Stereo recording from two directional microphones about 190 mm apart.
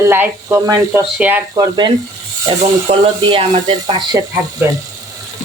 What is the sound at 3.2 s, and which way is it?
Speech, 25° right (ahead or behind).